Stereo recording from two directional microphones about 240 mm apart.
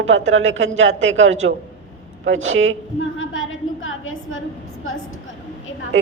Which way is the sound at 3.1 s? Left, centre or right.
Left.